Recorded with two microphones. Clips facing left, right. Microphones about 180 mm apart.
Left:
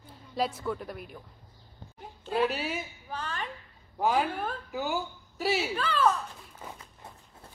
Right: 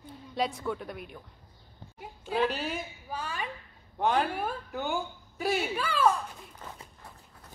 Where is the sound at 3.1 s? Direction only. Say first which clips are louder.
Even; 10° right (ahead or behind).